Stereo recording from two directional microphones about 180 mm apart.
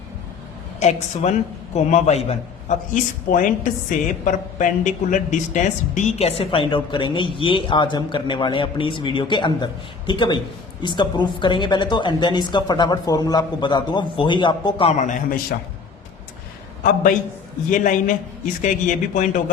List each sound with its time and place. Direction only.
0.8 s a man's voice: 40° left (ahead or behind)
17.7 s speech: 45° left (ahead or behind)